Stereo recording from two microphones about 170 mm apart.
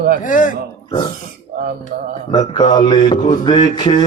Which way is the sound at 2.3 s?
30° left (ahead or behind).